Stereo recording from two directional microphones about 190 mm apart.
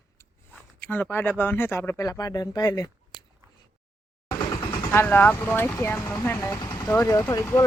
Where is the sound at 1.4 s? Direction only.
10° left (ahead or behind).